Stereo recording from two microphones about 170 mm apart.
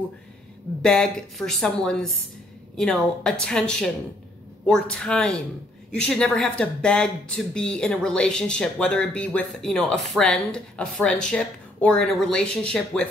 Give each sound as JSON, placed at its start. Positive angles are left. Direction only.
{"t": 0.8, "sound": "a woman's voice", "side_deg": 5}